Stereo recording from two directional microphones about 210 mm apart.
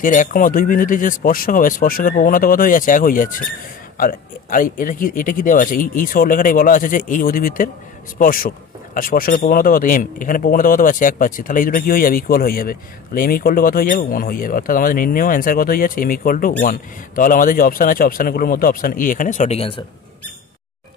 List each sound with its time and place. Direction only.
0.0 s speech: 40° left (ahead or behind)